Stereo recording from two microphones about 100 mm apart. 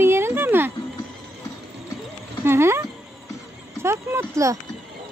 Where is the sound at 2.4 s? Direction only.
25° right (ahead or behind).